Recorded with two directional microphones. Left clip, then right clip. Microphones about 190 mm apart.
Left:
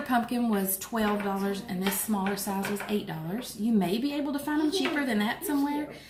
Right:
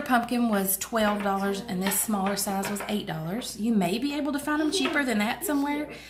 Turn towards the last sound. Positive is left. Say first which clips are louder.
# right 1 dB
turn(degrees=-40)  # may be behind; listen again after turning